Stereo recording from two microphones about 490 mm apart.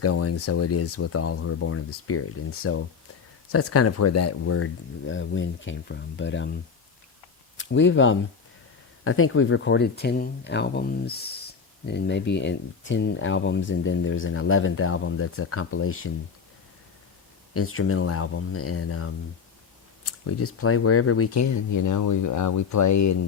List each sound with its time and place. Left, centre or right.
0.0 s speech: left
7.5 s speech: left
17.5 s speech: left